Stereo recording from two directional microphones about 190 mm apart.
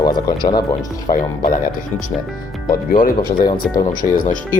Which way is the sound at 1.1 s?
50° left (ahead or behind).